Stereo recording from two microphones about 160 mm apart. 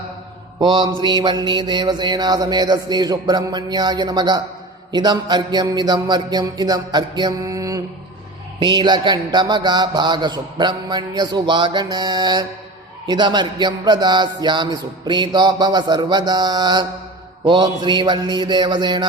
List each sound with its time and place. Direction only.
0.6 s speech: 25° right (ahead or behind)